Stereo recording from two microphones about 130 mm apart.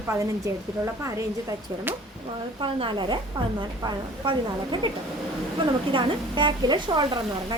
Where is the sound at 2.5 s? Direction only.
40° right (ahead or behind).